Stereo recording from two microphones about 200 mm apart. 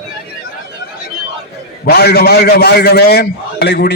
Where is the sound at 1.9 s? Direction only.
50° left (ahead or behind).